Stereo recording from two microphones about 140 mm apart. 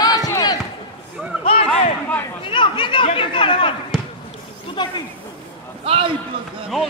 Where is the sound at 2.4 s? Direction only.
35° left (ahead or behind).